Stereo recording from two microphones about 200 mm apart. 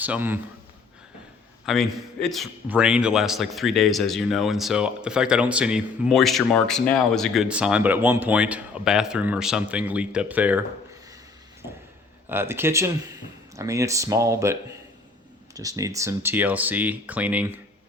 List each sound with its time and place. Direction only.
0.0 s speech: 10° right (ahead or behind)
1.6 s a man's voice: centre (ahead or behind)
12.3 s speech: 10° right (ahead or behind)